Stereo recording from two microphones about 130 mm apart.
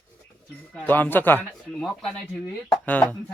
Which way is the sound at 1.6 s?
Centre (ahead or behind).